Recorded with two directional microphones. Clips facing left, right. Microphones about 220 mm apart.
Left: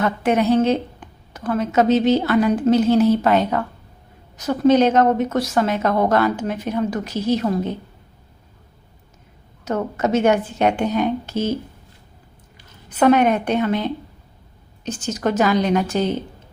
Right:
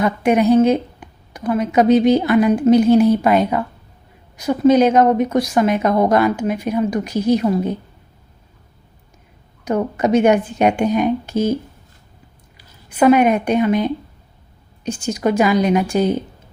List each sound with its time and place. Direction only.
0.0 s speech: 15° right (ahead or behind)
9.6 s speech: 15° right (ahead or behind)
12.9 s speech: 10° right (ahead or behind)